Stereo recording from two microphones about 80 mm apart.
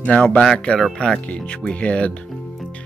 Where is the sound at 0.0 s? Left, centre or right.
Centre.